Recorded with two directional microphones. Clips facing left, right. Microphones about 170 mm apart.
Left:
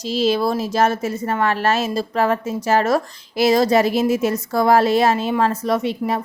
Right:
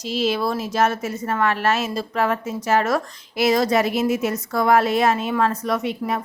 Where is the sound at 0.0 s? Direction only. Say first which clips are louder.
Left 3 dB; 35° left (ahead or behind).